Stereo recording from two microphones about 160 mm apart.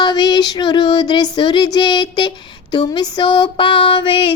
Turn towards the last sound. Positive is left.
turn(degrees=30)  # may be behind; listen again after turning